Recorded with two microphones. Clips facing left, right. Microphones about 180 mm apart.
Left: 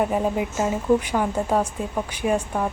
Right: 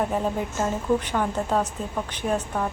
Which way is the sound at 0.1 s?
10° left (ahead or behind).